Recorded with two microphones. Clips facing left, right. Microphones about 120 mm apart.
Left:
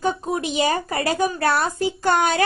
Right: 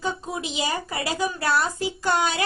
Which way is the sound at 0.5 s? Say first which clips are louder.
Left 6 dB; 55° left (ahead or behind).